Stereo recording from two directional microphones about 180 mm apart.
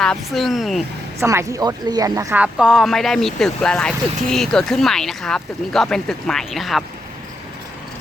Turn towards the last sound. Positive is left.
turn(degrees=0)  # may be behind; listen again after turning